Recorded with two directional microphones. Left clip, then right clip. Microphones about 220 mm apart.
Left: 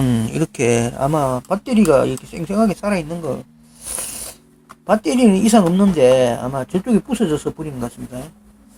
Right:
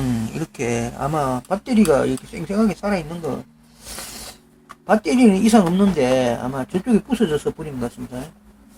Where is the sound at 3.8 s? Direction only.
35° left (ahead or behind).